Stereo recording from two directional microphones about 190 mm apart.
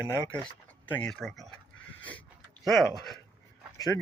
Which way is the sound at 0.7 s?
5° left (ahead or behind).